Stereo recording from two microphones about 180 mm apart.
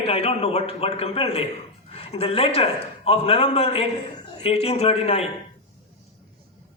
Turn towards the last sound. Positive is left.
turn(degrees=35)  # may be behind; listen again after turning